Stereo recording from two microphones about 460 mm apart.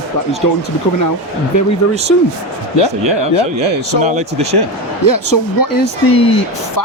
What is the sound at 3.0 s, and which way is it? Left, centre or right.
Speech, right.